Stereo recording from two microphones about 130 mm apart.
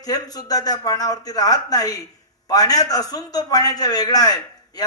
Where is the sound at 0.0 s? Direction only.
30° left (ahead or behind).